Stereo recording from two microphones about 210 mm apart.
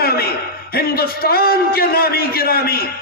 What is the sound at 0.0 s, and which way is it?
A man's voice, 45° left (ahead or behind).